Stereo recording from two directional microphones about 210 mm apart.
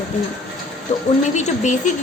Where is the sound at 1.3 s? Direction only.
35° left (ahead or behind).